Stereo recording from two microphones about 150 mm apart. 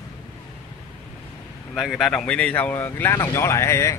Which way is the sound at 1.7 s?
Centre (ahead or behind).